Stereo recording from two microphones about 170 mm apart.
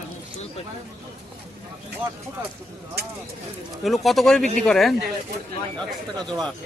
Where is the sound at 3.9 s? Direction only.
Centre (ahead or behind).